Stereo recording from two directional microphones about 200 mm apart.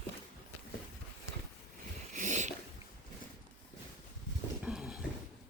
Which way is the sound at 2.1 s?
40° right (ahead or behind).